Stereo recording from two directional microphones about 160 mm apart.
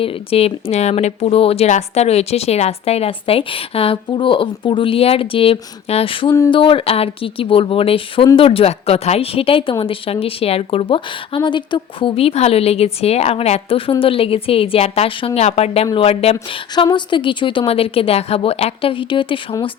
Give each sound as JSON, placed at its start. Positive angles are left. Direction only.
{"t": 0.0, "sound": "speech", "side_deg": 40}